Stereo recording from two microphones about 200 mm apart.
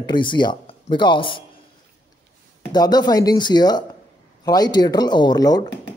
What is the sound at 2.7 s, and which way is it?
A man's voice, 20° left (ahead or behind).